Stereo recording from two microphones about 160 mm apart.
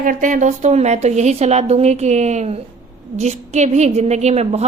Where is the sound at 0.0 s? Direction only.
55° right (ahead or behind).